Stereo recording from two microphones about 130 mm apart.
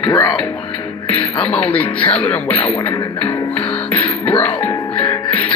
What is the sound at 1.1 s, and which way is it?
Speech, 10° left (ahead or behind).